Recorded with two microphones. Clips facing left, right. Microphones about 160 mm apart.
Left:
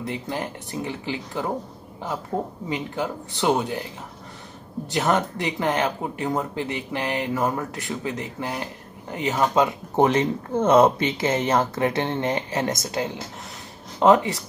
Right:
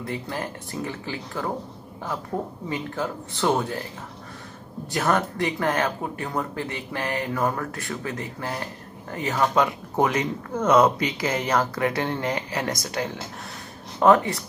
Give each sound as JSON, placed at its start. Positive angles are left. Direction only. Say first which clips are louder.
{"t": 0.0, "sound": "speech", "louder": "left 1 dB", "side_deg": 20}
{"t": 2.7, "sound": "speech", "louder": "left 1 dB", "side_deg": 20}
{"t": 4.9, "sound": "speech", "louder": "left 1 dB", "side_deg": 20}